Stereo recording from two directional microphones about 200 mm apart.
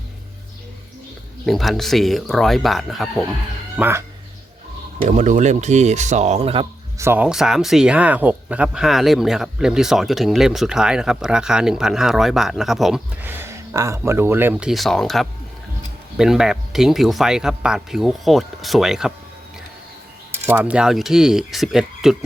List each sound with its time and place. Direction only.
1.5 s speech: centre (ahead or behind)
3.8 s speech: 10° right (ahead or behind)
5.0 s speech: 35° right (ahead or behind)
7.0 s speech: 10° right (ahead or behind)
20.3 s speech: 10° right (ahead or behind)